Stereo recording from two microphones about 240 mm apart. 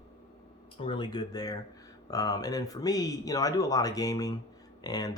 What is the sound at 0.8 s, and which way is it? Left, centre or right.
Speech, centre.